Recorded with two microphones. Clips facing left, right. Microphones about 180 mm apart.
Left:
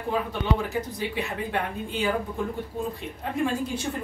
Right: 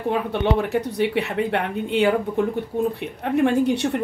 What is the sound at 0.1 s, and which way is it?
Speech, 65° right (ahead or behind).